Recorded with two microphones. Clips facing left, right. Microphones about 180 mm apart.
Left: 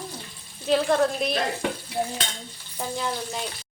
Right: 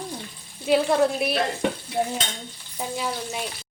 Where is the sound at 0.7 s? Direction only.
10° right (ahead or behind).